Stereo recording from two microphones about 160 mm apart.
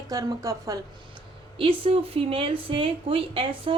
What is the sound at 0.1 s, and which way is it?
Speech, 20° right (ahead or behind).